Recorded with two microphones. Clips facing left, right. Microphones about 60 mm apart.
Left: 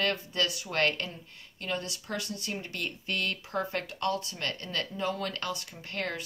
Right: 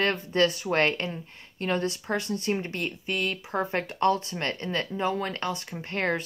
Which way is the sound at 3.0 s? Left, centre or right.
Centre.